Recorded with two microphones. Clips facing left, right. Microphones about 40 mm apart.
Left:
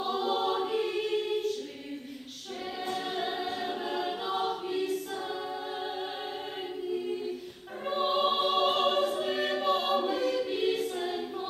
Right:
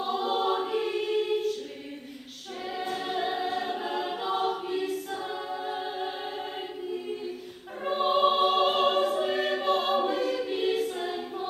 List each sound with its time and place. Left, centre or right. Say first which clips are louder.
0.0 s choir: right 2 dB; centre
2.8 s choir: right 2 dB; centre
7.9 s choir: right 4 dB; centre